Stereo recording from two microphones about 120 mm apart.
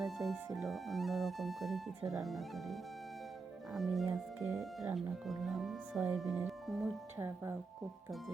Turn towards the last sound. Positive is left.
turn(degrees=-20)  # may be behind; listen again after turning